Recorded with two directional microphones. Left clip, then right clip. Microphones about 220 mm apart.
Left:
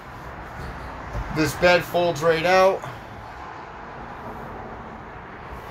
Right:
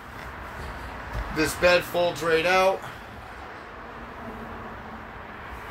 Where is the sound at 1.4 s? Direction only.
15° left (ahead or behind).